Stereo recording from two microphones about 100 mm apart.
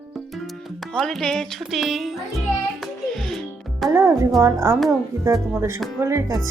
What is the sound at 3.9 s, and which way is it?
Speech, 25° right (ahead or behind).